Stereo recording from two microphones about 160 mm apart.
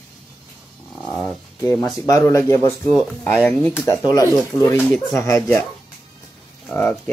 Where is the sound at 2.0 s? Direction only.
20° left (ahead or behind).